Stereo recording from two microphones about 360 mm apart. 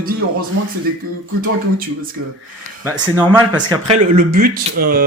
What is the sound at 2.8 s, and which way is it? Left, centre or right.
Speech, centre.